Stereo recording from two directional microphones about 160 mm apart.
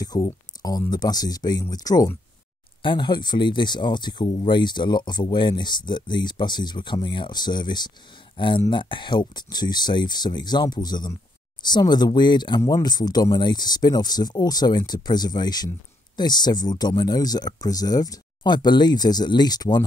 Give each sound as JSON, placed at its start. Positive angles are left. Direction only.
{"t": 0.0, "sound": "speech", "side_deg": 25}